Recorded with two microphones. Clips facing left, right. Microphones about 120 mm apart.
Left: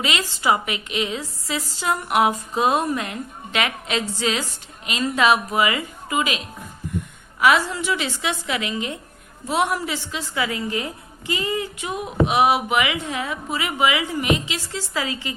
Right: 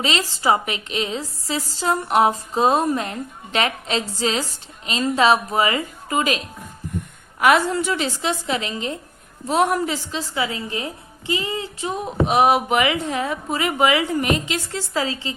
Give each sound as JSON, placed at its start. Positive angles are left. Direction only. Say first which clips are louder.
{"t": 0.0, "sound": "speech", "louder": "right 2 dB", "side_deg": -35}
{"t": 10.3, "sound": "a woman's voice", "louder": "left 2 dB", "side_deg": -25}
{"t": 11.9, "sound": "speech", "louder": "right 1 dB", "side_deg": -35}